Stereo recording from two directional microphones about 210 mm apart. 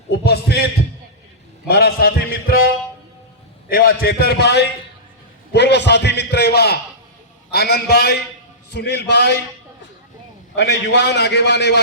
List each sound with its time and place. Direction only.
0.3 s a man's voice: 50° left (ahead or behind)
1.6 s a man's voice: 50° left (ahead or behind)
3.7 s a man's voice: 45° left (ahead or behind)
10.5 s a man's voice: 55° left (ahead or behind)